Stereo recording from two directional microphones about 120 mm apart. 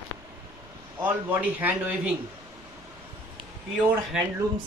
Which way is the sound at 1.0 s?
15° right (ahead or behind).